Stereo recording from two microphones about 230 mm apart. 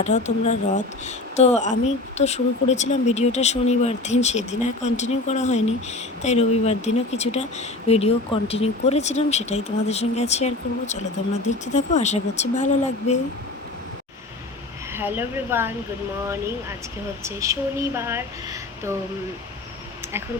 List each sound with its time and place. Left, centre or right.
0.0 s speech: left
14.9 s speech: centre